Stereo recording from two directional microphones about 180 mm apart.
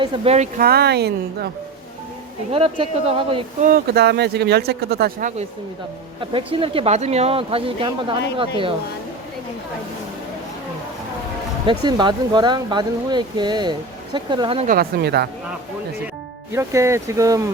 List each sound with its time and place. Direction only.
0.0 s speech: 35° right (ahead or behind)
0.6 s speech: 60° right (ahead or behind)
2.5 s speech: 30° right (ahead or behind)
3.6 s speech: 55° right (ahead or behind)
6.1 s speech: 30° right (ahead or behind)
11.6 s speech: 25° right (ahead or behind)
14.7 s speech: 60° right (ahead or behind)
16.5 s speech: 15° right (ahead or behind)